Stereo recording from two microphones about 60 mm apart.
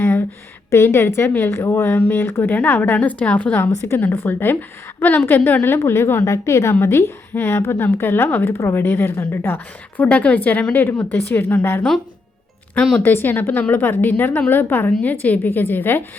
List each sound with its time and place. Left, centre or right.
0.0 s a sound: left
0.7 s a woman's voice: left
3.0 s a woman's voice: left
5.6 s a woman's voice: left
10.0 s speech: left
11.5 s a woman's voice: left
13.0 s a woman's voice: left